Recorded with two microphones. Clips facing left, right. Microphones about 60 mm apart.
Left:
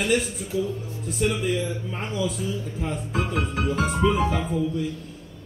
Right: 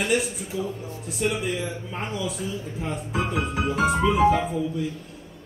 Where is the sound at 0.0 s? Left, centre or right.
Centre.